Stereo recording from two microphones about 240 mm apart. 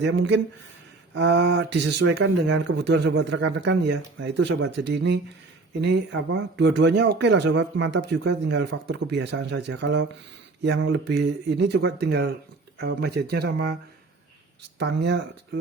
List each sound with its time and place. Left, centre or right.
0.0 s speech: right
14.8 s speech: right